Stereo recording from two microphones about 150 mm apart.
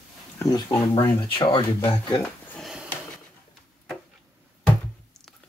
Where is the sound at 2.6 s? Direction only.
Centre (ahead or behind).